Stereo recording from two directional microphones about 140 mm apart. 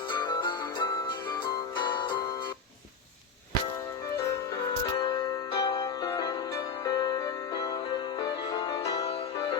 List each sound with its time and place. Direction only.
0.1 s music: 30° left (ahead or behind)
4.8 s music: 35° left (ahead or behind)
8.9 s music: 45° left (ahead or behind)